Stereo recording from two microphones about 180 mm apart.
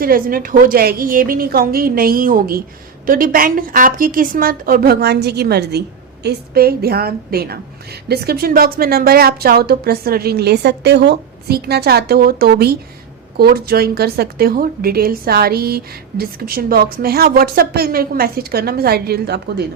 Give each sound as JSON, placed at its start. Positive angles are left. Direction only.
{"t": 0.0, "sound": "a woman's voice", "side_deg": -55}